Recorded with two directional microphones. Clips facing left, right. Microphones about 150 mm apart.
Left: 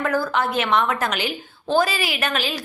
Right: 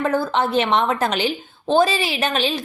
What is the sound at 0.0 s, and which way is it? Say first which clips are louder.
A woman's voice: right 2 dB; 25° right (ahead or behind).